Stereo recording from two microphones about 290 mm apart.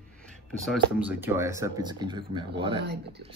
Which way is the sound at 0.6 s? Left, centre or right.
Centre.